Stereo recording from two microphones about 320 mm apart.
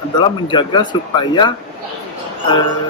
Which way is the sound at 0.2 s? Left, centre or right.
Centre.